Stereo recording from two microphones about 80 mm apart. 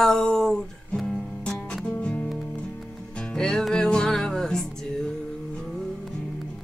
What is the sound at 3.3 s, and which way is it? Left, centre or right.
Music, centre.